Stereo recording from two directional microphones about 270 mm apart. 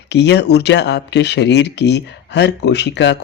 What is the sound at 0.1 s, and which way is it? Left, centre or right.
Speech, left.